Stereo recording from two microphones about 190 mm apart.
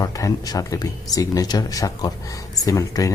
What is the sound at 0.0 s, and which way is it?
Speech, 20° left (ahead or behind).